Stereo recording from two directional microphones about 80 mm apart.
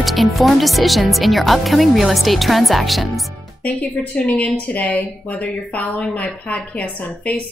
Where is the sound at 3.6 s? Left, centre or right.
Centre.